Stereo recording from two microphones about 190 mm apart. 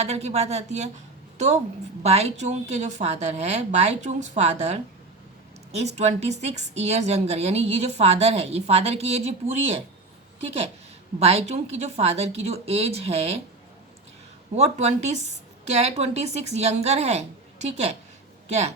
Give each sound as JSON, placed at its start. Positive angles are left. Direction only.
{"t": 0.0, "sound": "a woman's voice", "side_deg": -35}
{"t": 14.5, "sound": "speech", "side_deg": -35}